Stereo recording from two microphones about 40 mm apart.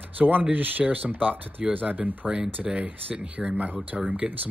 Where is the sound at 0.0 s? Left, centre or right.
Right.